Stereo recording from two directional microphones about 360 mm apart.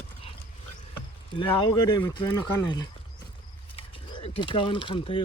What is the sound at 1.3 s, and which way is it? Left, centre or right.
Speech, centre.